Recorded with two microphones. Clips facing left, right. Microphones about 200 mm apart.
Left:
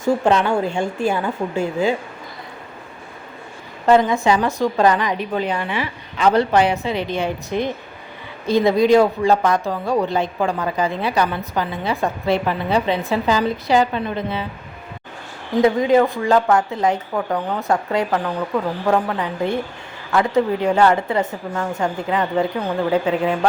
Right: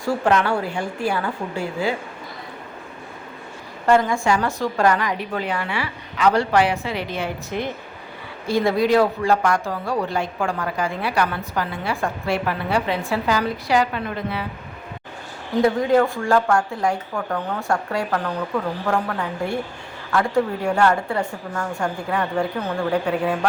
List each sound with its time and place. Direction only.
0.0 s a woman's voice: 20° left (ahead or behind)
3.8 s a woman's voice: 20° left (ahead or behind)
15.6 s a woman's voice: 20° left (ahead or behind)